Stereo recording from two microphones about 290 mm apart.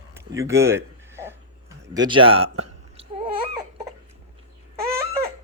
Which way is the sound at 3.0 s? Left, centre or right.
Centre.